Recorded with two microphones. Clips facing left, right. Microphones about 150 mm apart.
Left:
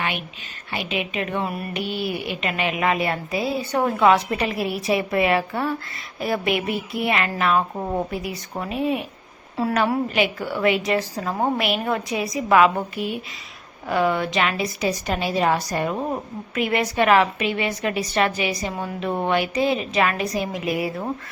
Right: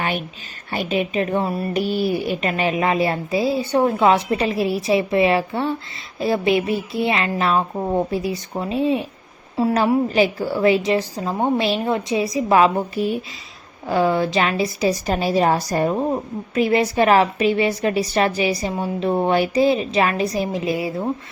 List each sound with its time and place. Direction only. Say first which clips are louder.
0.7 s a woman's voice: right 5 dB; 40° right (ahead or behind)